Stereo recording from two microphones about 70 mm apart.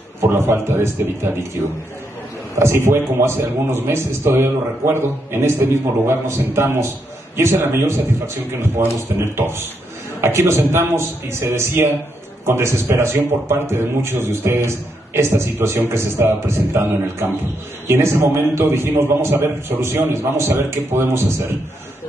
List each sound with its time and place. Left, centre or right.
0.3 s a man's voice: right
2.6 s a man's voice: right
9.1 s a man's voice: right